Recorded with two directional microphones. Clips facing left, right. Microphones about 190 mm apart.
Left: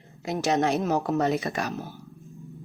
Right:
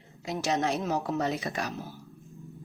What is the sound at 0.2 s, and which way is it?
A woman's voice, 60° left (ahead or behind).